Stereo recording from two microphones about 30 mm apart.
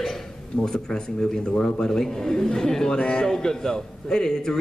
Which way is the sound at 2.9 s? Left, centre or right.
Left.